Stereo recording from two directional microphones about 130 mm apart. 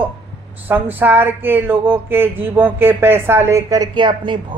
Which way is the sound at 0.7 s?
15° right (ahead or behind).